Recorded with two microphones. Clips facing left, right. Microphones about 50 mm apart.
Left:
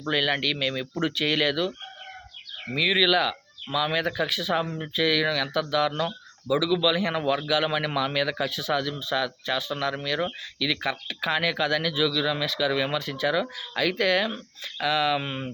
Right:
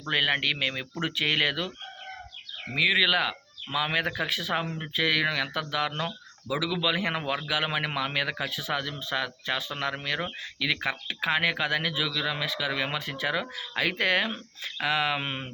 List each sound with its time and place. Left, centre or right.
0.1 s a man's voice: right
2.7 s a man's voice: right